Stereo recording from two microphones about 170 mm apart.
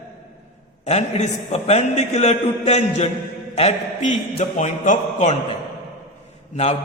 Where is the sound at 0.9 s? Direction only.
40° left (ahead or behind).